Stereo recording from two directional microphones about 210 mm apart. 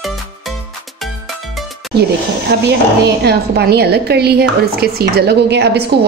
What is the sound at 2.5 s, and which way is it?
A woman's voice, 50° right (ahead or behind).